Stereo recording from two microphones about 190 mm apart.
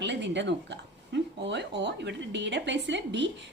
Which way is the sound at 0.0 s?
65° right (ahead or behind).